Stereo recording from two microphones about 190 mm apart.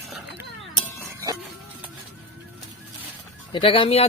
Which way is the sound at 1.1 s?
15° right (ahead or behind).